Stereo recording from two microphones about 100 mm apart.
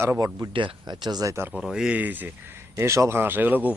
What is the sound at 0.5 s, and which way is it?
Speech, 50° right (ahead or behind).